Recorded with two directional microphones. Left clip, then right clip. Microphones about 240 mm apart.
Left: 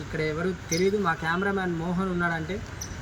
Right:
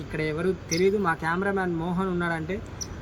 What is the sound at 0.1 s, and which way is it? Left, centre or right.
Speech, right.